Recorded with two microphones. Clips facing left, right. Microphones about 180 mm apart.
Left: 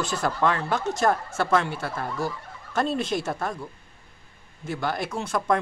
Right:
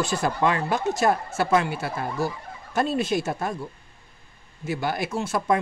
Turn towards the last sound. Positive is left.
turn(degrees=-5)  # may be behind; listen again after turning